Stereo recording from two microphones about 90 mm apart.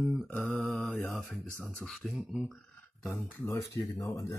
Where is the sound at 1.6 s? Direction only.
10° left (ahead or behind).